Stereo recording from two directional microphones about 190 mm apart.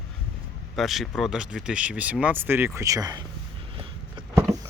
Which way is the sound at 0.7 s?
Centre (ahead or behind).